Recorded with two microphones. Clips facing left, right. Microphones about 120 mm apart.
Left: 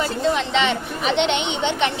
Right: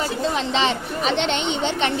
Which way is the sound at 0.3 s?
30° right (ahead or behind).